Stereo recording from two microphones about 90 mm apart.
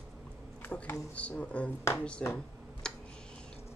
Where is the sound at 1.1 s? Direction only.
15° left (ahead or behind).